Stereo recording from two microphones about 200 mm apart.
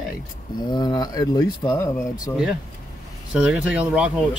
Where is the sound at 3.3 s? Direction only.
5° right (ahead or behind).